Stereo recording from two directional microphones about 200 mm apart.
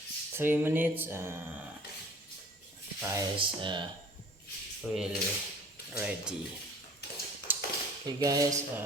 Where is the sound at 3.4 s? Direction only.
25° right (ahead or behind).